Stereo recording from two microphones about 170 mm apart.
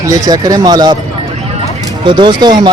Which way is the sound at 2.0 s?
25° right (ahead or behind).